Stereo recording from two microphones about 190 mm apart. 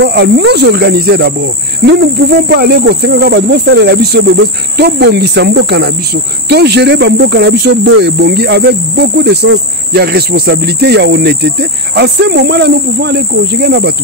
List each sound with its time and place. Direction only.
0.0 s speech: 65° right (ahead or behind)